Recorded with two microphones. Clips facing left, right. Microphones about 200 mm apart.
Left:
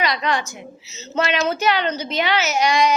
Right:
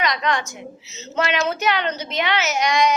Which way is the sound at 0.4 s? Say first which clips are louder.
Right 1 dB; centre (ahead or behind).